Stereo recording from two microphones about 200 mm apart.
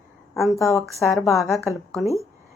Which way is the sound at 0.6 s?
15° left (ahead or behind).